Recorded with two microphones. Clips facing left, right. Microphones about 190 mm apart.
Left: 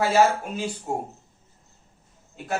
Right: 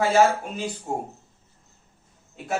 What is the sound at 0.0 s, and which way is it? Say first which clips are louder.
Speech: right 1 dB; 5° left (ahead or behind).